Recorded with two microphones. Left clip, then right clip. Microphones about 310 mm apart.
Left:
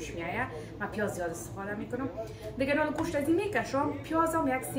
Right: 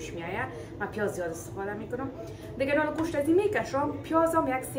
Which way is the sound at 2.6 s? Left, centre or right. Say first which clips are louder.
Right 2 dB; centre.